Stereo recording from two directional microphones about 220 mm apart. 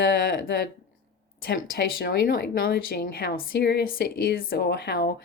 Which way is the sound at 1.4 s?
45° left (ahead or behind).